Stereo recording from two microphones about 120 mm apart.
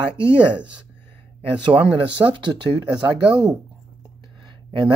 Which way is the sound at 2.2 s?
15° right (ahead or behind).